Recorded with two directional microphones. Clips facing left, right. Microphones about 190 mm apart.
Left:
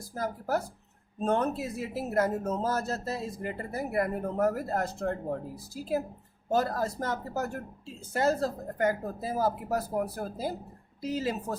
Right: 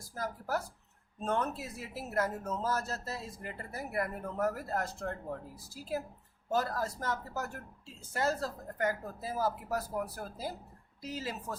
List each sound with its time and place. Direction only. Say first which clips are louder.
0.1 s speech: left 5 dB; 25° left (ahead or behind)